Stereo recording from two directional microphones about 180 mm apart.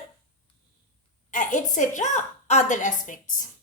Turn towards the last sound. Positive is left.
turn(degrees=45)  # may be behind; listen again after turning